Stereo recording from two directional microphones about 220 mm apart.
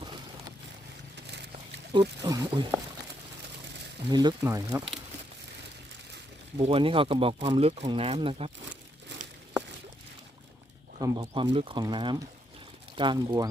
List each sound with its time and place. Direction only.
0.0 s boat: 20° right (ahead or behind)
1.9 s speech: 20° right (ahead or behind)
4.1 s speech: 20° right (ahead or behind)
6.6 s speech: 25° right (ahead or behind)
11.0 s speech: 20° right (ahead or behind)